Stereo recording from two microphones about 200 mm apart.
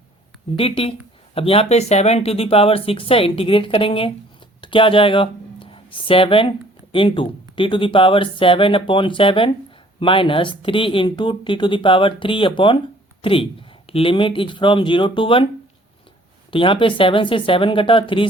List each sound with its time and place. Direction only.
0.5 s speech: 30° left (ahead or behind)
16.5 s speech: 25° left (ahead or behind)